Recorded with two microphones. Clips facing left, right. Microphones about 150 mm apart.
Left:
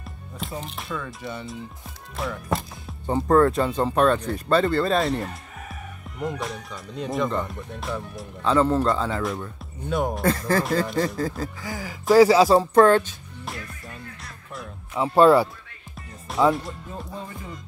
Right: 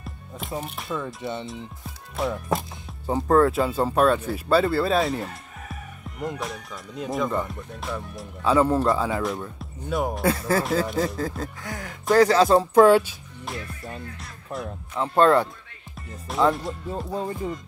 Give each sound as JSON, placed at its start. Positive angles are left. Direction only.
{"t": 0.6, "sound": "speech", "side_deg": -5}
{"t": 0.9, "sound": "speech", "side_deg": -25}
{"t": 2.2, "sound": "speech", "side_deg": 0}